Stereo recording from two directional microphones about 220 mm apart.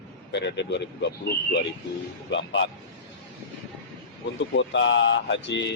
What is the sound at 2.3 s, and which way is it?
Speech, 55° left (ahead or behind).